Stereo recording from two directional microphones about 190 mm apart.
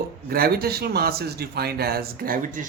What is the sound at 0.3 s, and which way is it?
Speech, 50° right (ahead or behind).